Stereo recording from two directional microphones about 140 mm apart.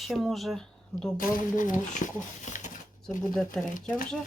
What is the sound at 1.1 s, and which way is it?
Speech, 70° left (ahead or behind).